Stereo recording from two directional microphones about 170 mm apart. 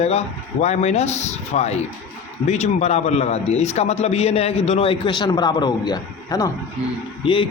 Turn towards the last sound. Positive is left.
turn(degrees=30)  # may be behind; listen again after turning